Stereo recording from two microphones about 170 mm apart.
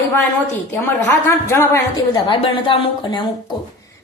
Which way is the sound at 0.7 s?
10° left (ahead or behind).